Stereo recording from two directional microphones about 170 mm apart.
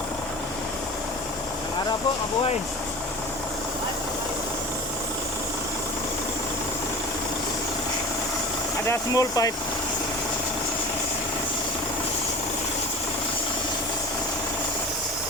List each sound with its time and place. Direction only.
8.9 s speech: 20° left (ahead or behind)